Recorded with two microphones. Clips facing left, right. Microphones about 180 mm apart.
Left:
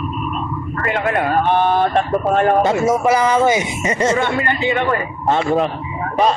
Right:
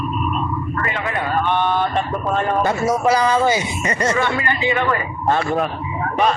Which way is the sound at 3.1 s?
20° left (ahead or behind).